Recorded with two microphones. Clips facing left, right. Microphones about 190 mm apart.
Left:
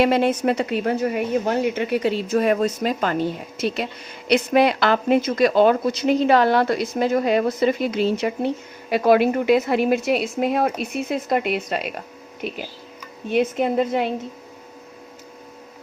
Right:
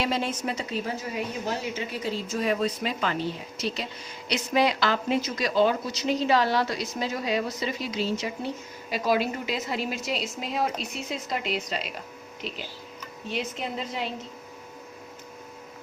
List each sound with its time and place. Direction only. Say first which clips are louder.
0.0 s speech: left 10 dB; 60° left (ahead or behind)